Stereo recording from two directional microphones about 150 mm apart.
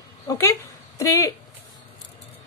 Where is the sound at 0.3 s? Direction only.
20° left (ahead or behind).